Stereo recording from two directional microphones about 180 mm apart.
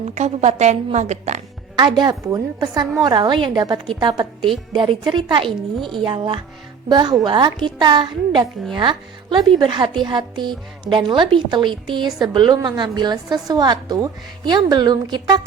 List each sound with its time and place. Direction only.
0.1 s a woman's voice: 40° right (ahead or behind)
1.7 s a woman's voice: 20° right (ahead or behind)